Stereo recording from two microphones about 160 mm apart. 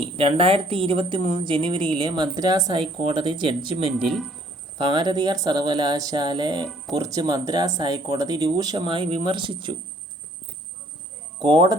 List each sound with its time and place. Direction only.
0.0 s a woman's voice: 35° right (ahead or behind)
3.9 s speech: centre (ahead or behind)
4.8 s speech: 25° right (ahead or behind)
11.3 s speech: 30° right (ahead or behind)